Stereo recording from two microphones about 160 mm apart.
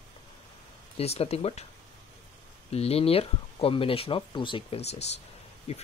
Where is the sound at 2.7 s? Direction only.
40° left (ahead or behind).